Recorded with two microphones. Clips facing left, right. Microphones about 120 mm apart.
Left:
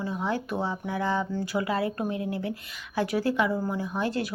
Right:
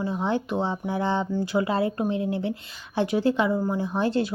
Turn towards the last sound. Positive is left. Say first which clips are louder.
# right 4 dB
turn(degrees=-30)  # may be behind; listen again after turning